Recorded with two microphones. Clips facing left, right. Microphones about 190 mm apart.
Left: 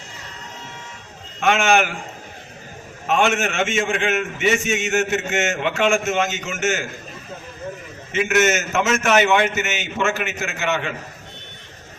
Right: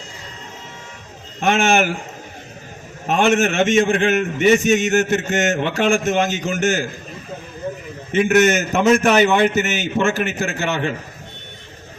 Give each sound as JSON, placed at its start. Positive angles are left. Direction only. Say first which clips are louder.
{"t": 1.4, "sound": "a man's voice", "louder": "right 1 dB", "side_deg": -35}
{"t": 3.1, "sound": "a man's voice", "louder": "right 3 dB", "side_deg": -40}
{"t": 8.4, "sound": "a man's voice", "louder": "right 1 dB", "side_deg": -35}